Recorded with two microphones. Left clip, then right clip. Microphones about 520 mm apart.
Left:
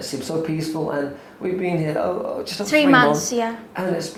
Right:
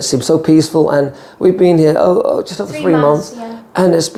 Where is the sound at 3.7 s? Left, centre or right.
Right.